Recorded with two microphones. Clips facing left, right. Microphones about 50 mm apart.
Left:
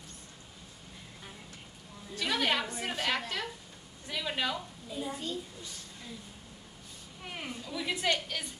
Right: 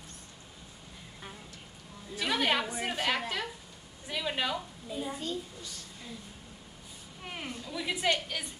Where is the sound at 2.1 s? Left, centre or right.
Centre.